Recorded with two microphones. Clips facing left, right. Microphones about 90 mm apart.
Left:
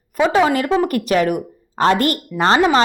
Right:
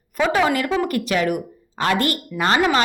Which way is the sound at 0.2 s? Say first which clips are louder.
Left 4 dB; 25° left (ahead or behind).